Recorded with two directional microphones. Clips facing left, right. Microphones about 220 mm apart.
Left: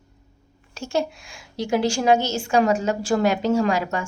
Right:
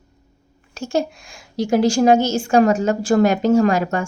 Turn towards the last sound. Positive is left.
turn(degrees=-50)  # may be behind; listen again after turning